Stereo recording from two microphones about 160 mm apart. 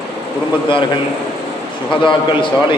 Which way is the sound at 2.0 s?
30° left (ahead or behind).